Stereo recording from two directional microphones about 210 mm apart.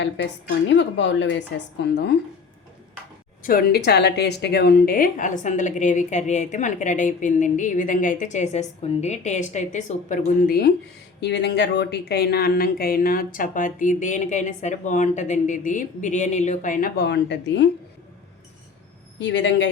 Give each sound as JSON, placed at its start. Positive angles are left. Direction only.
{"t": 0.0, "sound": "a woman's voice", "side_deg": 55}
{"t": 3.4, "sound": "speech", "side_deg": 45}
{"t": 19.2, "sound": "a woman's voice", "side_deg": 55}